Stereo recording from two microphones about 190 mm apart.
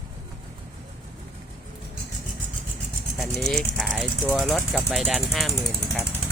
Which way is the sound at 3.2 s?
Centre (ahead or behind).